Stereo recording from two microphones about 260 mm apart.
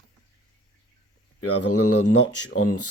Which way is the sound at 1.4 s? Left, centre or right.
Left.